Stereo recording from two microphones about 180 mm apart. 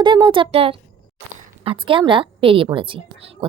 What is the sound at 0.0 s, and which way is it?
A woman's voice, 25° right (ahead or behind).